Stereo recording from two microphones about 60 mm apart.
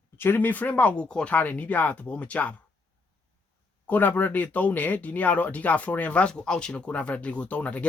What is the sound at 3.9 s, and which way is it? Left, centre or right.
Speech, left.